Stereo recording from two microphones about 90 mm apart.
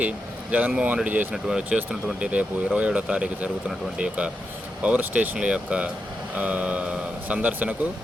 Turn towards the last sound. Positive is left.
turn(degrees=-20)  # may be behind; listen again after turning